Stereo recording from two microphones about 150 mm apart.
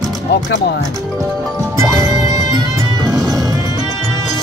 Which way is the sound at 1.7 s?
20° right (ahead or behind).